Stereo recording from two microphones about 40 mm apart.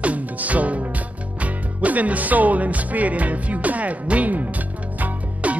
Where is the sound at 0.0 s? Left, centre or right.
Right.